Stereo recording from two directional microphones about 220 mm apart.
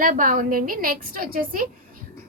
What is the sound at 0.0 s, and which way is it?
A woman's voice, 40° right (ahead or behind).